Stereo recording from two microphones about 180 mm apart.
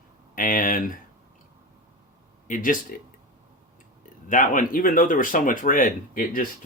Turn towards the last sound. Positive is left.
turn(degrees=50)  # may be behind; listen again after turning